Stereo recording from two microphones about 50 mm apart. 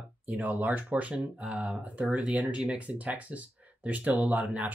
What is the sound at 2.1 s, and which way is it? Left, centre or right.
Speech, centre.